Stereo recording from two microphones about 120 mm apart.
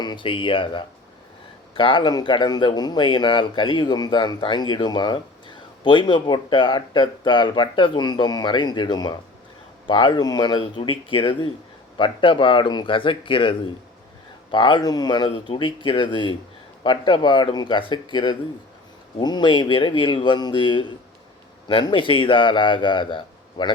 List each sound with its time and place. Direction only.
0.0 s a man's voice: 40° left (ahead or behind)